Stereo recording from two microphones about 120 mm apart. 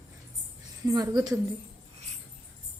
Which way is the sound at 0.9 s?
30° right (ahead or behind).